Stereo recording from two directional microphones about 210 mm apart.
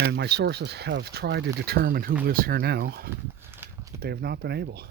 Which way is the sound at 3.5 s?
10° right (ahead or behind).